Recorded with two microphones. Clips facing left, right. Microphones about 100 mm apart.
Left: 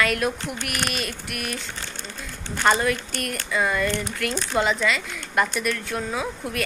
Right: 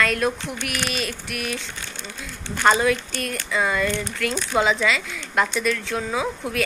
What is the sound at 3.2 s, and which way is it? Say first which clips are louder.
Speech: right 1 dB; 55° left (ahead or behind).